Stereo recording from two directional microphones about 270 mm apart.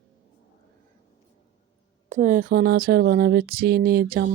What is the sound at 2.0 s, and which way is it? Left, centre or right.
Speech, right.